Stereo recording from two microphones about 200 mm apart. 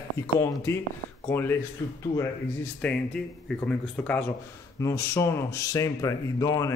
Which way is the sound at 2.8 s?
5° left (ahead or behind).